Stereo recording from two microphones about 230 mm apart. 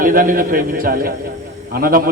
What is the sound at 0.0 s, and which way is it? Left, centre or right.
A man's voice, right.